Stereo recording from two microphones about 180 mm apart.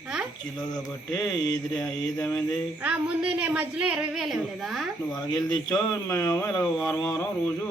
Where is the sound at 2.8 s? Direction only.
5° right (ahead or behind).